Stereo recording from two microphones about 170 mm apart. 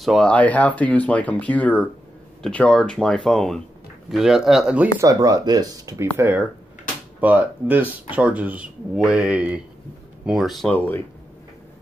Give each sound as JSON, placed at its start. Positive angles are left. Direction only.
{"t": 0.0, "sound": "speech", "side_deg": 0}
{"t": 5.0, "sound": "speech", "side_deg": -20}